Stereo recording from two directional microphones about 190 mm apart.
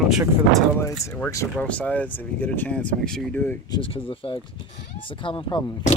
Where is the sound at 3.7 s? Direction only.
25° left (ahead or behind).